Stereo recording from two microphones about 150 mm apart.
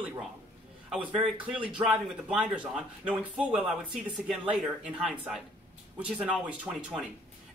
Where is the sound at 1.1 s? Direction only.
35° right (ahead or behind).